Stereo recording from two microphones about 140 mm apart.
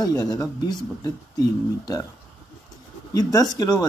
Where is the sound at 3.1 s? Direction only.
25° left (ahead or behind).